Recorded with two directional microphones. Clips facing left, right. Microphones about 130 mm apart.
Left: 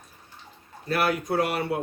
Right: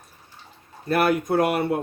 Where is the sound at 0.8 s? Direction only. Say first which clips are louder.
Right 4 dB; 50° right (ahead or behind).